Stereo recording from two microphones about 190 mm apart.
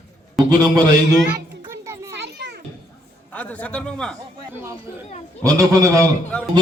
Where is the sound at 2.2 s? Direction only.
65° right (ahead or behind).